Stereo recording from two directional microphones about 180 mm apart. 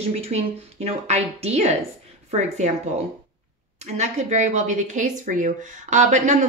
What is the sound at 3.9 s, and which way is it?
A woman's voice, 40° right (ahead or behind).